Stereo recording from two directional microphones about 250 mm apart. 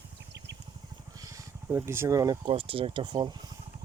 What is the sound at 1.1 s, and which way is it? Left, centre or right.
Speech, centre.